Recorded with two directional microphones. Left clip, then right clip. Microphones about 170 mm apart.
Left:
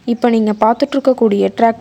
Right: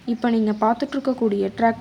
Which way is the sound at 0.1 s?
45° left (ahead or behind).